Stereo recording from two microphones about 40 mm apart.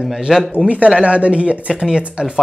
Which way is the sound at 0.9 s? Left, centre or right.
Right.